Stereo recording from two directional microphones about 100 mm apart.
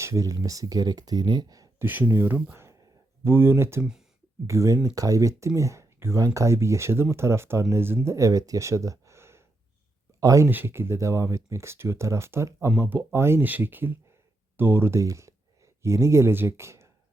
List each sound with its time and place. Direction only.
0.0 s speech: 30° right (ahead or behind)
1.8 s speech: 20° right (ahead or behind)
10.5 s speech: 20° right (ahead or behind)